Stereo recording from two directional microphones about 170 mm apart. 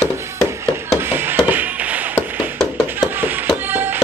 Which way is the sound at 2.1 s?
Centre (ahead or behind).